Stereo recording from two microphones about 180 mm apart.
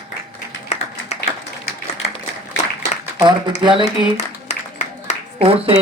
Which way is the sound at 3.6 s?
25° right (ahead or behind).